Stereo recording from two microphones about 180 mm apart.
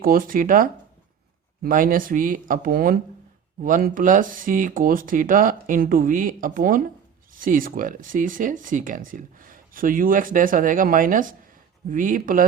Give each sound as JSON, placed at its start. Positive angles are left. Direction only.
{"t": 0.0, "sound": "speech", "side_deg": -50}